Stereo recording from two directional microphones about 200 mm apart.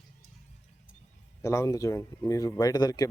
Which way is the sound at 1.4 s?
15° left (ahead or behind).